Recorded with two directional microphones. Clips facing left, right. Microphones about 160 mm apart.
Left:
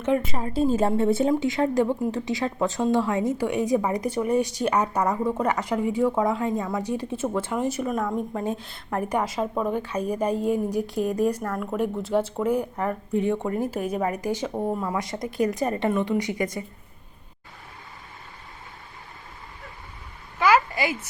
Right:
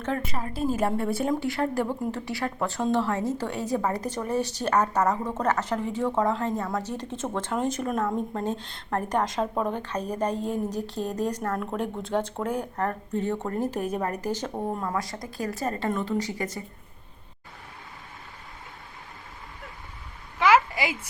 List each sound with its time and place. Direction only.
0.3 s speech: 25° left (ahead or behind); by 14.9 s 10° left (ahead or behind)
14.9 s speech: 20° left (ahead or behind)
20.5 s a sound: 10° right (ahead or behind)